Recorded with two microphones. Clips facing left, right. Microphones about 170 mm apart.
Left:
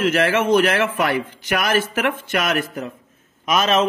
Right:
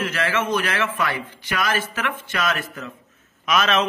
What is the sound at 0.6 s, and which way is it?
Speech, 65° left (ahead or behind).